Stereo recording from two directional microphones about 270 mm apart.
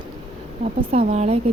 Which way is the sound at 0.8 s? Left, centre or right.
Right.